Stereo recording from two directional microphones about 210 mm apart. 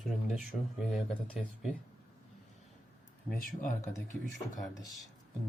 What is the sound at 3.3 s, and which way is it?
Speech, 40° left (ahead or behind).